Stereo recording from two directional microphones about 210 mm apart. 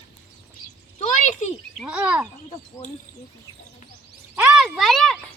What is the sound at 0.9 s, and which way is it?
Speech, 35° left (ahead or behind).